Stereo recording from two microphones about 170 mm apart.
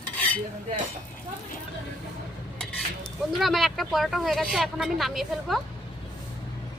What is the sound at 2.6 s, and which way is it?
Speech, 5° left (ahead or behind).